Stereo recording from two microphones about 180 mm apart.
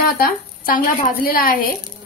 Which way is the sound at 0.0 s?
55° left (ahead or behind).